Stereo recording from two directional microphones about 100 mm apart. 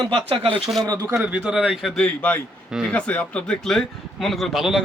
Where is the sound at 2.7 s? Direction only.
5° right (ahead or behind).